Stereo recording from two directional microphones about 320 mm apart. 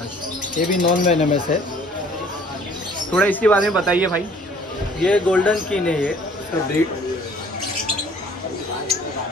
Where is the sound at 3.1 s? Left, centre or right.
Centre.